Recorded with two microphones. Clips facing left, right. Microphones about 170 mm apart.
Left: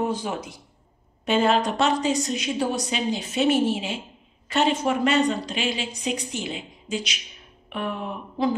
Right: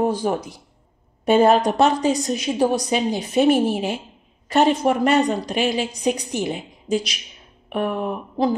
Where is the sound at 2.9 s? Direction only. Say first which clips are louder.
Right 6 dB; 50° right (ahead or behind).